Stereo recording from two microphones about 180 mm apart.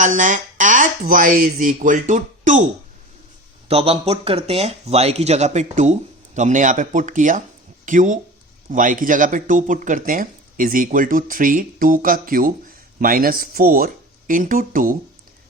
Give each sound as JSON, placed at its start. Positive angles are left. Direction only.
{"t": 0.0, "sound": "speech", "side_deg": -45}
{"t": 3.7, "sound": "speech", "side_deg": -35}